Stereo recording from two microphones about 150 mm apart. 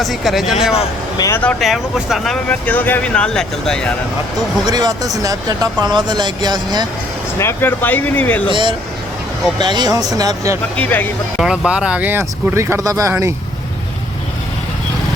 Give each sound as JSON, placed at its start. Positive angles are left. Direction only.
{"t": 0.0, "sound": "speech", "side_deg": 0}
{"t": 4.6, "sound": "speech", "side_deg": -25}
{"t": 7.3, "sound": "speech", "side_deg": 15}
{"t": 8.4, "sound": "speech", "side_deg": -35}
{"t": 10.8, "sound": "speech", "side_deg": 10}
{"t": 11.3, "sound": "speech", "side_deg": -5}